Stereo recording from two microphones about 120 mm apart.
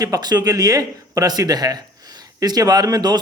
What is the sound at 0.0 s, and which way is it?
Speech, 30° right (ahead or behind).